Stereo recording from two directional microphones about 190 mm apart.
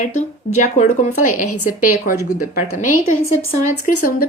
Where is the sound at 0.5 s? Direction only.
40° left (ahead or behind).